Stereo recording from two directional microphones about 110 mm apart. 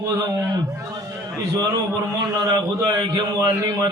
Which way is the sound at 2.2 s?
35° right (ahead or behind).